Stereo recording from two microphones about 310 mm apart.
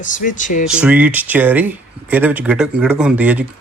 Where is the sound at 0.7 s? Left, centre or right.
Centre.